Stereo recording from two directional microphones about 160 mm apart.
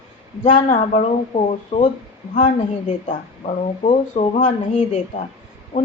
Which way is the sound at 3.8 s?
45° left (ahead or behind).